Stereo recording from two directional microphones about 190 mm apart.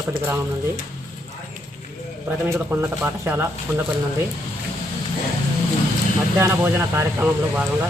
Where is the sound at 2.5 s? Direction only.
10° right (ahead or behind).